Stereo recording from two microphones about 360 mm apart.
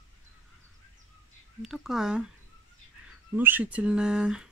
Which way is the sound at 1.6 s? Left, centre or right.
Centre.